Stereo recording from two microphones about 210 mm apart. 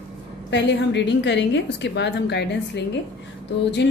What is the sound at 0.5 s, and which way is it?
A woman's voice, 55° left (ahead or behind).